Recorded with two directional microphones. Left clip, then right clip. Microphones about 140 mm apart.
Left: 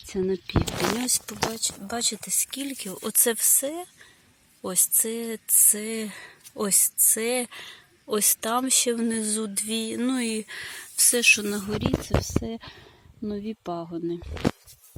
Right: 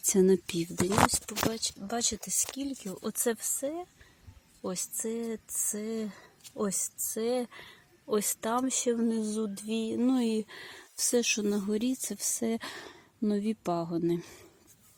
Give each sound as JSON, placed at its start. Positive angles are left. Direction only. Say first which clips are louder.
{"t": 0.1, "sound": "speech", "louder": "right 3 dB", "side_deg": -50}
{"t": 1.3, "sound": "speech", "louder": "left 3 dB", "side_deg": 0}
{"t": 11.8, "sound": "speech", "louder": "left 7 dB", "side_deg": -35}